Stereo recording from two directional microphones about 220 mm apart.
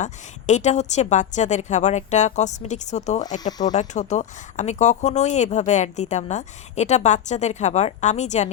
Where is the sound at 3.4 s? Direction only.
20° left (ahead or behind).